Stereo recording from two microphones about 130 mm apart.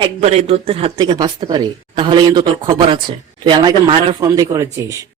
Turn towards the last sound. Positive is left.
turn(degrees=-25)  # may be behind; listen again after turning